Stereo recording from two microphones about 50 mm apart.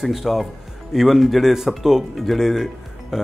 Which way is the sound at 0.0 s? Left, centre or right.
Centre.